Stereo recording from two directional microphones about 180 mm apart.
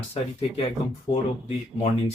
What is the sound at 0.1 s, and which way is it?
Speech, 35° left (ahead or behind).